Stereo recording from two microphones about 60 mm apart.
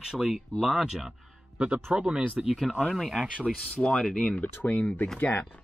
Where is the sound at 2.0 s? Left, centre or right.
Right.